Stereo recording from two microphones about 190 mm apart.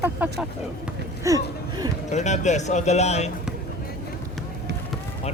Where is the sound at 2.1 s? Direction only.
40° left (ahead or behind).